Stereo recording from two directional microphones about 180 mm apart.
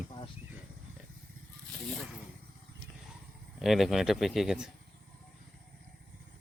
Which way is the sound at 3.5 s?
Centre (ahead or behind).